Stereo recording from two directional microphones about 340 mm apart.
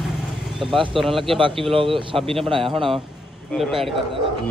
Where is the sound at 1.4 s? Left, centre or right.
Centre.